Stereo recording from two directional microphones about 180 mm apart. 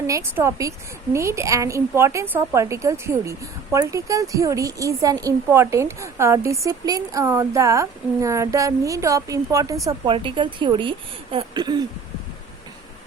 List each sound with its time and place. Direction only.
0.1 s a woman's voice: 15° right (ahead or behind)